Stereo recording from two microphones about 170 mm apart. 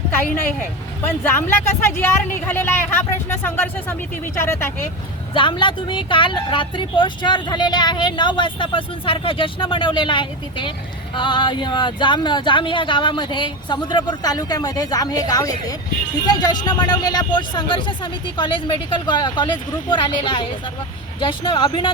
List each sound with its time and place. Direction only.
1.0 s speech: 10° left (ahead or behind)
5.3 s speech: 30° left (ahead or behind)